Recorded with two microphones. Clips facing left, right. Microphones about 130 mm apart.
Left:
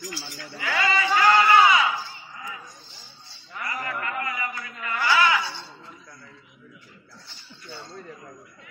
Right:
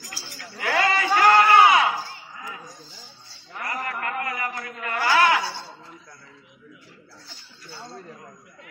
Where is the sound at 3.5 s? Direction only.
50° right (ahead or behind).